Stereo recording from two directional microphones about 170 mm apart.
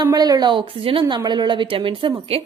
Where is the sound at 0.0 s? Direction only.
20° right (ahead or behind).